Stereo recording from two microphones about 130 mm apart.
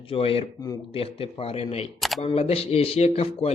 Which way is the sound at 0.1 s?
45° left (ahead or behind).